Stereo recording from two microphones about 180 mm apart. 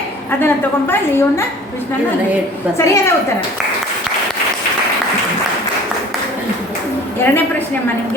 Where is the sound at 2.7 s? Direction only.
15° left (ahead or behind).